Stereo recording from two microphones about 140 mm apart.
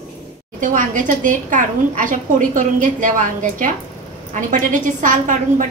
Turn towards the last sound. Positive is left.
turn(degrees=-65)  # may be behind; listen again after turning